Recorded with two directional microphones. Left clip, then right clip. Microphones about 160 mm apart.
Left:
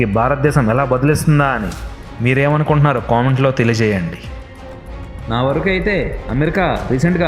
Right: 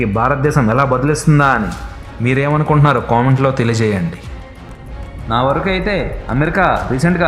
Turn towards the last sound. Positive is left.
turn(degrees=15)  # may be behind; listen again after turning